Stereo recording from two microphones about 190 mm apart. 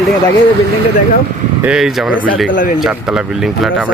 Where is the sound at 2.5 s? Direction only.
45° left (ahead or behind).